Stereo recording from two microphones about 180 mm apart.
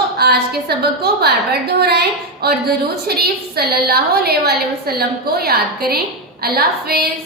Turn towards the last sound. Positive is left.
turn(degrees=-60)  # may be behind; listen again after turning